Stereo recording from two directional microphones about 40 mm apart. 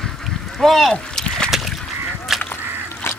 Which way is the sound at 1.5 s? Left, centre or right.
Centre.